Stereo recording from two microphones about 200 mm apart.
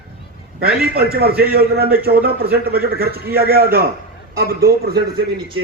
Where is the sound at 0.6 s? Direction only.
50° right (ahead or behind).